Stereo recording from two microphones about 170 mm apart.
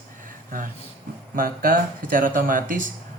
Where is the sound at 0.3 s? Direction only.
55° right (ahead or behind).